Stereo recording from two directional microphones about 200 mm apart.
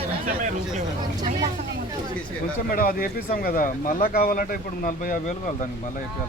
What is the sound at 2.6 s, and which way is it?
Speech, 45° left (ahead or behind).